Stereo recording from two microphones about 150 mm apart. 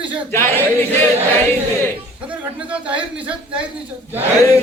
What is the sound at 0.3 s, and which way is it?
Speech, 15° left (ahead or behind).